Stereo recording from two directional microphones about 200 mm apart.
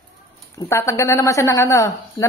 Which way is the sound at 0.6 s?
15° left (ahead or behind).